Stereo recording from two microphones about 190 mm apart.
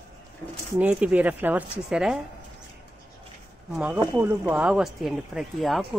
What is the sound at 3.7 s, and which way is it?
Speech, 5° right (ahead or behind).